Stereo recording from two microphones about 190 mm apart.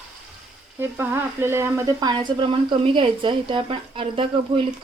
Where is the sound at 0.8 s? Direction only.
10° right (ahead or behind).